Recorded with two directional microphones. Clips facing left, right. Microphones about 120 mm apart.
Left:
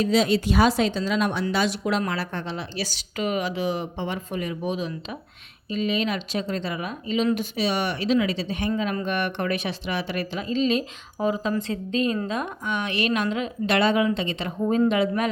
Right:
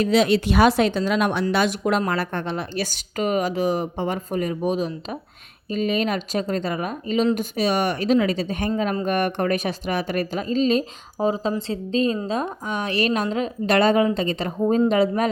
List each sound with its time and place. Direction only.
0.0 s speech: 65° right (ahead or behind); by 15.3 s 40° right (ahead or behind)